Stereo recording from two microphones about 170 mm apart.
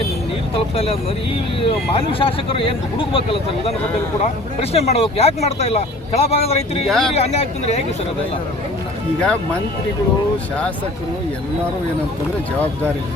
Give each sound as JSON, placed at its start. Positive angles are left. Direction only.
{"t": 0.5, "sound": "speech", "side_deg": 35}
{"t": 4.7, "sound": "speech", "side_deg": 40}
{"t": 6.8, "sound": "speech", "side_deg": 0}
{"t": 7.1, "sound": "speech", "side_deg": 40}
{"t": 9.2, "sound": "speech", "side_deg": 5}